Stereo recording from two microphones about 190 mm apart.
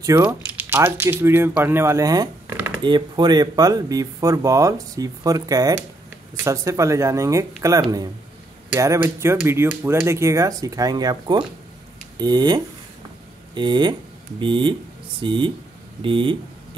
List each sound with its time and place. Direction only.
0.0 s speech: 15° right (ahead or behind)